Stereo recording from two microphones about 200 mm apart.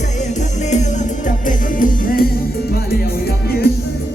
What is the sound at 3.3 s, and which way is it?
Music, 50° left (ahead or behind).